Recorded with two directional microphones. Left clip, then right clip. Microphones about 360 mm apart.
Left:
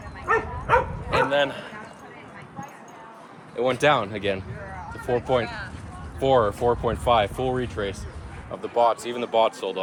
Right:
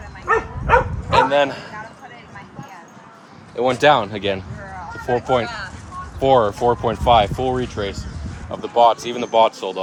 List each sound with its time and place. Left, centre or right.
0.3 s bow-wow: right
3.5 s speech: centre
5.0 s speech: right
6.1 s speech: centre